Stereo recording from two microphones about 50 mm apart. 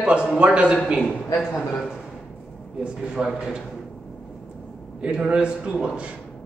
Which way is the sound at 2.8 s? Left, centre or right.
Centre.